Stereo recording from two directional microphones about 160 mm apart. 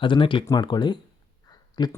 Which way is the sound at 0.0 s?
30° left (ahead or behind).